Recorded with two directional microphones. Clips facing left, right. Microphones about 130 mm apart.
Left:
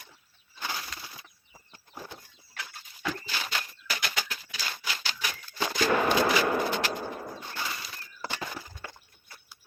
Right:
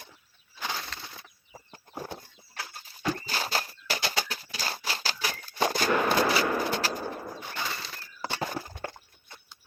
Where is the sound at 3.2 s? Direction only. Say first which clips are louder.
Right 4 dB; 40° right (ahead or behind).